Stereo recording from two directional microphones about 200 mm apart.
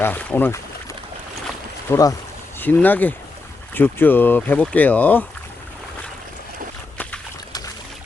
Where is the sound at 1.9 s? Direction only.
15° left (ahead or behind).